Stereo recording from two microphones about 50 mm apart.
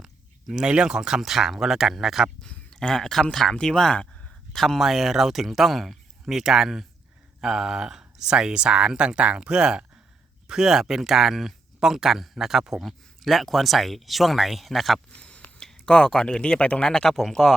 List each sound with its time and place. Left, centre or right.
0.0 s speech: centre
2.5 s speech: centre
15.1 s a sound: left
15.6 s speech: centre